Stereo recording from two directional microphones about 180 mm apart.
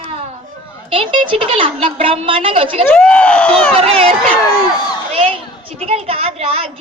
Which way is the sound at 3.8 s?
30° right (ahead or behind).